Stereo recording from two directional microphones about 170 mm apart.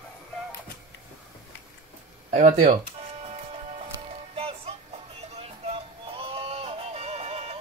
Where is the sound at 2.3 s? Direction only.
45° right (ahead or behind).